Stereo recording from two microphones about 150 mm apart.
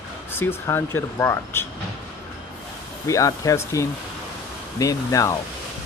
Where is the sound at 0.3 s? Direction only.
15° left (ahead or behind).